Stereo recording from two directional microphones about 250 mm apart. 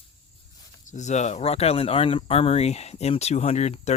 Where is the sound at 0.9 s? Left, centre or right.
Left.